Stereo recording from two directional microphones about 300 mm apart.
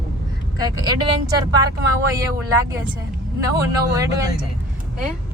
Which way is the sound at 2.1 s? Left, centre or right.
Centre.